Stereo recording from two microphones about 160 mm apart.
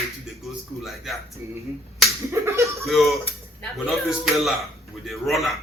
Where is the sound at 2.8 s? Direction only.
Centre (ahead or behind).